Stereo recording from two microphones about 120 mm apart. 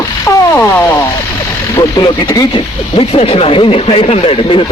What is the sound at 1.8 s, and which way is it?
Speech, 35° left (ahead or behind).